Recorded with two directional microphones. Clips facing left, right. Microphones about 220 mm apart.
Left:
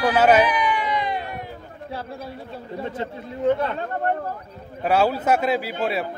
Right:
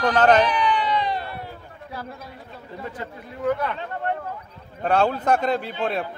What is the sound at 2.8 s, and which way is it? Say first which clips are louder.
Speech: left 5 dB; 25° left (ahead or behind).